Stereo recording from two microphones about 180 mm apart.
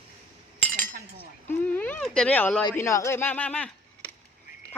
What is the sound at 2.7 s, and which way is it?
Speech, 15° left (ahead or behind).